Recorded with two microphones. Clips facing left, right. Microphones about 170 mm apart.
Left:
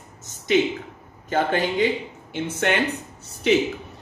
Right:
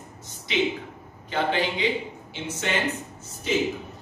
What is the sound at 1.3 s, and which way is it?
A man's voice, 45° left (ahead or behind).